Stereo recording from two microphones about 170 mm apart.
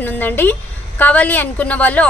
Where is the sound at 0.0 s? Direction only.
10° left (ahead or behind).